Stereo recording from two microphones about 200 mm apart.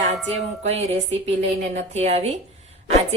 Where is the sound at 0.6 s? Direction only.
30° right (ahead or behind).